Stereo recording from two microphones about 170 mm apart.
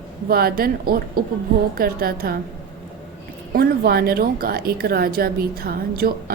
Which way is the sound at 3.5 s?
60° right (ahead or behind).